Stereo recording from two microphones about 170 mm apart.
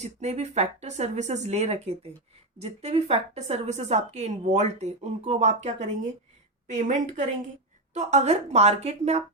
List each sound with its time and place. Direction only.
0.0 s a woman's voice: 40° right (ahead or behind)